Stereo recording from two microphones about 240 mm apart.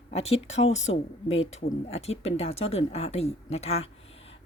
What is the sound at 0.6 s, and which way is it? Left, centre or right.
Speech, left.